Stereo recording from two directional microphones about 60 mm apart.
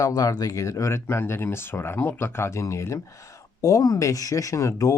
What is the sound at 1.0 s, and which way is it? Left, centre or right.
Speech, left.